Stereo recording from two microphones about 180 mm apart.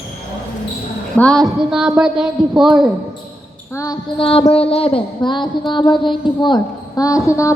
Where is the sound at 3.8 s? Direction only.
25° left (ahead or behind).